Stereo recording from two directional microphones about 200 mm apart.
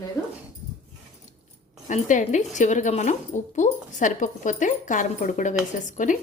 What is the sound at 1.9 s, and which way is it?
A woman's voice, 40° left (ahead or behind).